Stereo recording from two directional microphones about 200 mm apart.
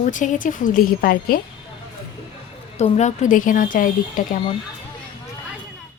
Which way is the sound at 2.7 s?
35° left (ahead or behind).